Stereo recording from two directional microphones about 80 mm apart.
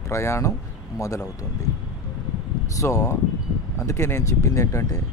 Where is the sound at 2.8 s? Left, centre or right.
Left.